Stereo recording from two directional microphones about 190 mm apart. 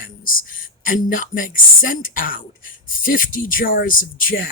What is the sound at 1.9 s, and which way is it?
Speech, 45° left (ahead or behind).